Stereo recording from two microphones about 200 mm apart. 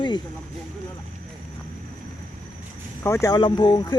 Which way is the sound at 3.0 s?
15° left (ahead or behind).